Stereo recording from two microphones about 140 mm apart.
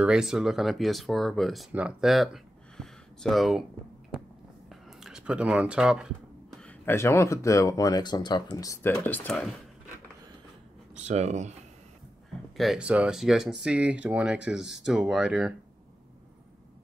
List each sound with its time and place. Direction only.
0.0 s speech: 5° right (ahead or behind)
4.6 s a sound: 5° right (ahead or behind)
6.6 s speech: 15° left (ahead or behind)
8.8 s speech: 10° left (ahead or behind)
11.0 s speech: 55° right (ahead or behind)
12.5 s speech: 5° right (ahead or behind)